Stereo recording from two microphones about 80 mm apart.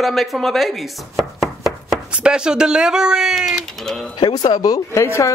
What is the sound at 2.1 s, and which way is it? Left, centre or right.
Speech, centre.